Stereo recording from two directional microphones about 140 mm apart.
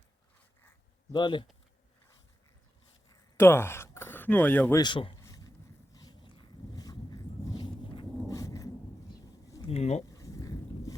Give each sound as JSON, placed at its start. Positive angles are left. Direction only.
{"t": 1.1, "sound": "speech", "side_deg": 35}
{"t": 3.1, "sound": "a sound", "side_deg": 20}
{"t": 4.8, "sound": "speech", "side_deg": 35}
{"t": 5.1, "sound": "a sound", "side_deg": 25}
{"t": 8.3, "sound": "thunder", "side_deg": 25}
{"t": 9.6, "sound": "speech", "side_deg": 50}
{"t": 10.1, "sound": "boat", "side_deg": 25}